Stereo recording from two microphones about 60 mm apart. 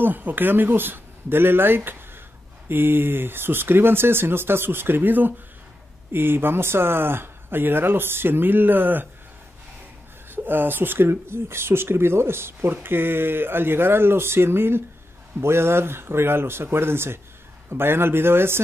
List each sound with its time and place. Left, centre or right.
0.0 s speech: right
10.3 s speech: right